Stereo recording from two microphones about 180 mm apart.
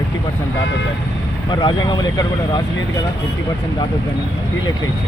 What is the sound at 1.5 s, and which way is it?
Speech, 25° left (ahead or behind).